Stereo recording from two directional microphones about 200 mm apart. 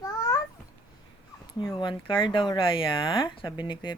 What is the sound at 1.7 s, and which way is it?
Speech, 25° left (ahead or behind).